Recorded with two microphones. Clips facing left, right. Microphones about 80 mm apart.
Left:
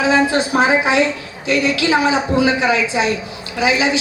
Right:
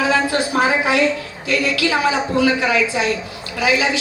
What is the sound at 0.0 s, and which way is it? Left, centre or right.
A woman's voice, left.